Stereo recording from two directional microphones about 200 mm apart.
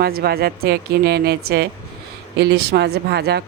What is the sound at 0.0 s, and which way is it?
Speech, 50° right (ahead or behind).